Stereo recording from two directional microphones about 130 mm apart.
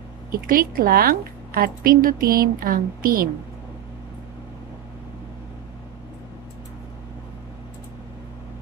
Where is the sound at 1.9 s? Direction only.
90° right.